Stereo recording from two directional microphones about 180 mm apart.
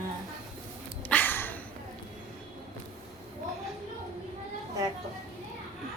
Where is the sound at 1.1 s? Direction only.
10° left (ahead or behind).